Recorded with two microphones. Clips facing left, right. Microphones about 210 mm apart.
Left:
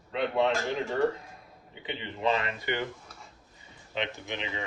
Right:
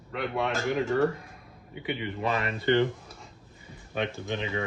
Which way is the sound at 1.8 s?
25° left (ahead or behind).